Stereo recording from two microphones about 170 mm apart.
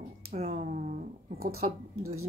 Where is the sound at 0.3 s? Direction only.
40° right (ahead or behind).